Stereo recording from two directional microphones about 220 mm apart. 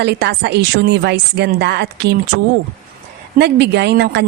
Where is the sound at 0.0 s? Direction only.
50° right (ahead or behind).